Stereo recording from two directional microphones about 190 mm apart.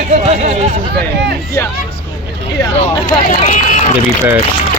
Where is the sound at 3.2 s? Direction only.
45° left (ahead or behind).